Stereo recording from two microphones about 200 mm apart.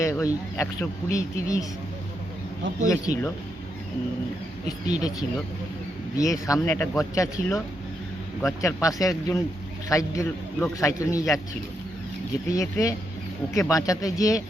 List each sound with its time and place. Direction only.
0.0 s speech: 15° left (ahead or behind)
2.8 s speech: 15° left (ahead or behind)
6.1 s speech: 15° left (ahead or behind)
12.5 s speech: 15° left (ahead or behind)